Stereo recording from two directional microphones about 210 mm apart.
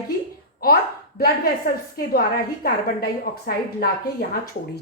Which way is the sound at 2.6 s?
45° left (ahead or behind).